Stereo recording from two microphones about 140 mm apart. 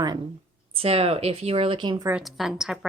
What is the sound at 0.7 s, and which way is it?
Speech, 45° right (ahead or behind).